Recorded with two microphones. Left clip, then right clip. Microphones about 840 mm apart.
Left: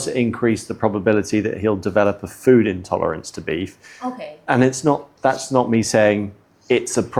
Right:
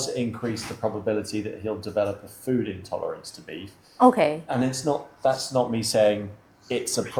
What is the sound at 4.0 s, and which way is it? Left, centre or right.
Speech, right.